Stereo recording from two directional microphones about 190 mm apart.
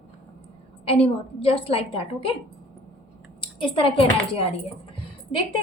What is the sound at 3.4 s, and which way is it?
A woman's voice, 25° left (ahead or behind).